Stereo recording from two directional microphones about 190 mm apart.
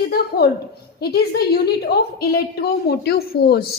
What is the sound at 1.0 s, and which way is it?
A woman's voice, 55° left (ahead or behind).